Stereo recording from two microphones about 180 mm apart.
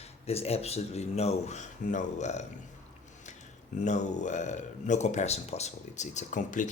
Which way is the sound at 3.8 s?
40° left (ahead or behind).